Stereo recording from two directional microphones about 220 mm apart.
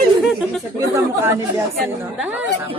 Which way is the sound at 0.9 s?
10° right (ahead or behind).